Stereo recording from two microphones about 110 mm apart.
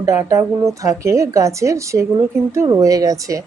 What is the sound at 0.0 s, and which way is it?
Speech, 30° right (ahead or behind).